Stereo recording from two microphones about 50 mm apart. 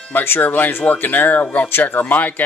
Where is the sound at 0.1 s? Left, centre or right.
Left.